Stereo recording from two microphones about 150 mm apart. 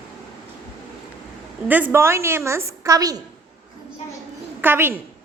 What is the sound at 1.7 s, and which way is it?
A woman's voice, 10° right (ahead or behind).